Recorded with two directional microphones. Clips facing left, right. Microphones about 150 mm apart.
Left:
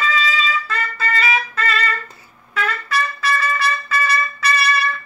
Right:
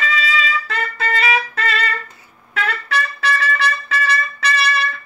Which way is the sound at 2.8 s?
70° right (ahead or behind).